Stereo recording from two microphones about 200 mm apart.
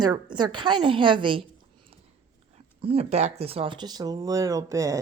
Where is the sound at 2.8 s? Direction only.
30° right (ahead or behind).